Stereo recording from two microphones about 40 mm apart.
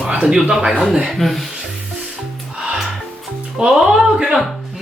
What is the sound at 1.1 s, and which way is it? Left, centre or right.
Speech, centre.